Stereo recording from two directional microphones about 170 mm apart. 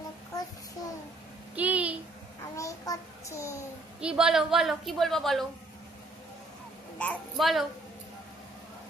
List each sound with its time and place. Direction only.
1.5 s a sound: 10° right (ahead or behind)
2.6 s child singing: 20° left (ahead or behind)
4.0 s a woman's voice: 5° right (ahead or behind)
7.0 s a woman's voice: 5° left (ahead or behind)